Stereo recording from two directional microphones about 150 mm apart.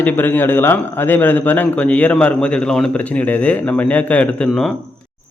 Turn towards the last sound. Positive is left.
turn(degrees=0)  # may be behind; listen again after turning